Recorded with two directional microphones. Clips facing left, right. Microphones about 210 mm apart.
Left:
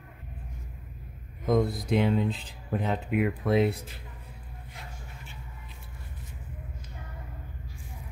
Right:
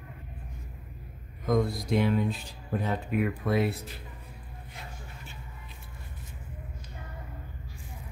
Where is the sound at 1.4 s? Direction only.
20° left (ahead or behind).